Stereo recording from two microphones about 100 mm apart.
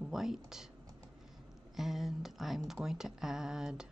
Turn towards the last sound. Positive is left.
turn(degrees=-5)  # may be behind; listen again after turning